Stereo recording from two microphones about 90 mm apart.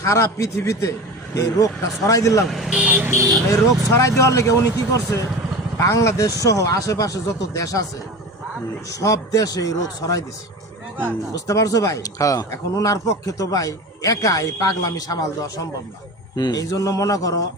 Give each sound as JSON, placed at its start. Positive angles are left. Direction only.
{"t": 0.0, "sound": "speech", "side_deg": 35}
{"t": 2.5, "sound": "speech", "side_deg": -5}
{"t": 3.5, "sound": "speech", "side_deg": 35}
{"t": 9.0, "sound": "speech", "side_deg": 40}
{"t": 11.3, "sound": "speech", "side_deg": 40}